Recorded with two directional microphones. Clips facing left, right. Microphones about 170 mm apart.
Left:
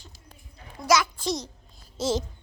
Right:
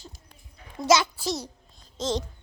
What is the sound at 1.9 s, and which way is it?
Babbling, 10° left (ahead or behind).